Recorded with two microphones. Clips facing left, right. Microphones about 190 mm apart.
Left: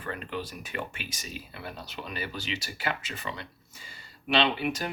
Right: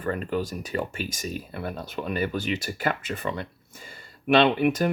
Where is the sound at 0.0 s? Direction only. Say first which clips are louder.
Right 8 dB; 45° right (ahead or behind).